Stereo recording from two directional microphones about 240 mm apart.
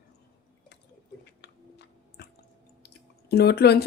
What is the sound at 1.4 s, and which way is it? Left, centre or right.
Squish, left.